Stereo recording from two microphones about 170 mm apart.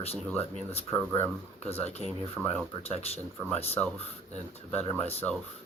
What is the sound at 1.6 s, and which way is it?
Speech, 40° left (ahead or behind).